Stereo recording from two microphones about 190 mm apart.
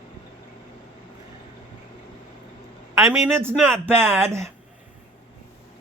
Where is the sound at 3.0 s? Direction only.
15° right (ahead or behind).